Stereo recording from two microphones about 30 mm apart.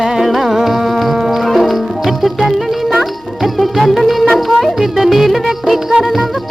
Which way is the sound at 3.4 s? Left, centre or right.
Centre.